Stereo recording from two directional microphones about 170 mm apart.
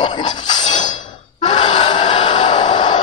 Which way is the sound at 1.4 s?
25° left (ahead or behind).